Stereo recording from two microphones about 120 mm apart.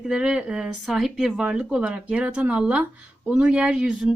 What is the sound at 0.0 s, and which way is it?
Speech, 5° right (ahead or behind).